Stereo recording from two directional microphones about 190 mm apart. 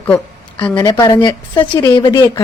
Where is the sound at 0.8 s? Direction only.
20° left (ahead or behind).